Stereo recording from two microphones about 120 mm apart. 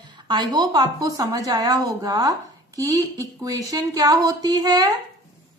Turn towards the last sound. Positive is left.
turn(degrees=-30)  # may be behind; listen again after turning